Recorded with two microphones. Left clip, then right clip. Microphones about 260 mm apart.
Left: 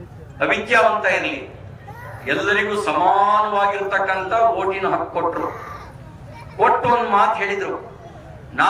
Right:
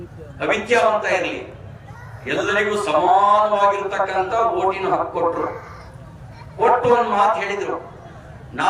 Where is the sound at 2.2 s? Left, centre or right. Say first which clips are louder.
Left 1 dB; centre.